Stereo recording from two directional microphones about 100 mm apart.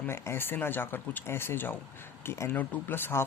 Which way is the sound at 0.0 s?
25° left (ahead or behind).